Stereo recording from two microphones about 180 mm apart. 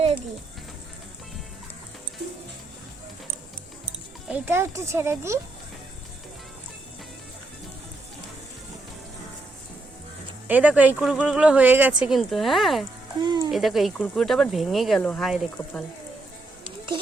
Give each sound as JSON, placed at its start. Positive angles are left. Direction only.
{"t": 4.3, "sound": "speech", "side_deg": -10}
{"t": 10.5, "sound": "speech", "side_deg": -10}
{"t": 13.2, "sound": "a sound", "side_deg": -25}
{"t": 13.5, "sound": "speech", "side_deg": 0}